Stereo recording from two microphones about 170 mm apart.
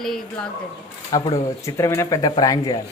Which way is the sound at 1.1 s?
20° left (ahead or behind).